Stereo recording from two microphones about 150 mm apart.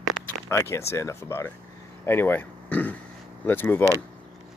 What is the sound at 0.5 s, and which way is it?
Speech, 20° left (ahead or behind).